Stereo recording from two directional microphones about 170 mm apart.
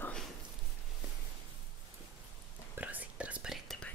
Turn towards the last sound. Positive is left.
turn(degrees=0)  # may be behind; listen again after turning